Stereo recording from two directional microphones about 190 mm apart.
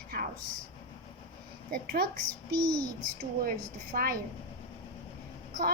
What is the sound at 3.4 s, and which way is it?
Speech, 50° right (ahead or behind).